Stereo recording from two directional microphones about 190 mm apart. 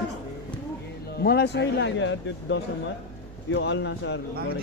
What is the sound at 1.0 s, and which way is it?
Speech, 60° left (ahead or behind).